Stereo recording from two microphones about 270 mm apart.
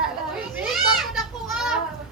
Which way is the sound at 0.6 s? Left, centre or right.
Centre.